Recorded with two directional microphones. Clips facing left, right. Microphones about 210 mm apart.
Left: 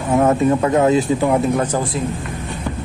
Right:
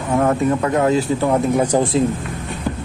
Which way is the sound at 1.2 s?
5° left (ahead or behind).